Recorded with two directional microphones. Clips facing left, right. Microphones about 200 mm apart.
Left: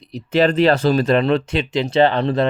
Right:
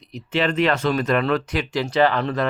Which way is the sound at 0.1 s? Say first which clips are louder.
Left 6 dB; 40° left (ahead or behind).